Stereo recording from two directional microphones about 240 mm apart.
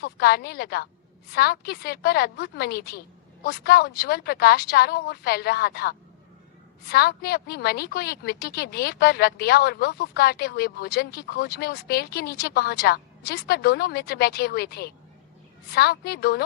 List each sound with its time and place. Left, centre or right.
0.0 s a woman's voice: left